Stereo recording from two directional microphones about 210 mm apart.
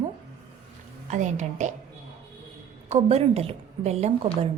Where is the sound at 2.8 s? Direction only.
30° right (ahead or behind).